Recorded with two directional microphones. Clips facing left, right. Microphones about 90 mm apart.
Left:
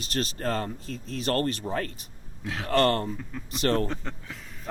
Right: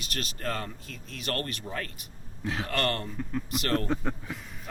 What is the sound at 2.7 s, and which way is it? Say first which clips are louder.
Speech: left 10 dB; 30° left (ahead or behind).